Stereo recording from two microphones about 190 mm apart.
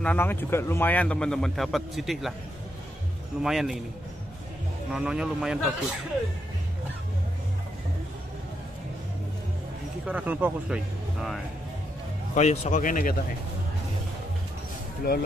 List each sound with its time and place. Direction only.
0.0 s a man's voice: 10° left (ahead or behind)
3.4 s a man's voice: centre (ahead or behind)
4.9 s a man's voice: 5° right (ahead or behind)
10.0 s speech: 10° right (ahead or behind)
12.4 s speech: 35° left (ahead or behind)